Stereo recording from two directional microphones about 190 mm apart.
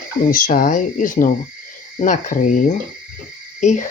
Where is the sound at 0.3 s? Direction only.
45° left (ahead or behind).